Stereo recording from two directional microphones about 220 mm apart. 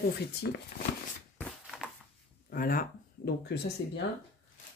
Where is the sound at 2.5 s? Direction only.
40° left (ahead or behind).